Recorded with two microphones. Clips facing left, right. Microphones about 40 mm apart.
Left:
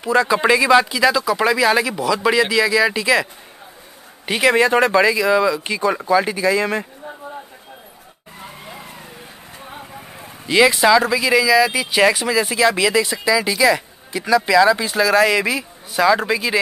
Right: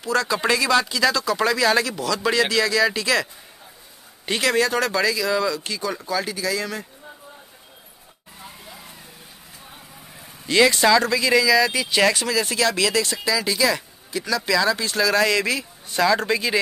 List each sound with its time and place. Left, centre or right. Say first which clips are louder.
0.0 s speech: left 6 dB; left
4.3 s speech: left 5 dB; centre; by 6.9 s left
10.5 s speech: left 3 dB; centre